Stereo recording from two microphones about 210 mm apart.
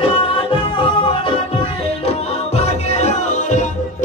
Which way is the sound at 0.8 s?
25° left (ahead or behind).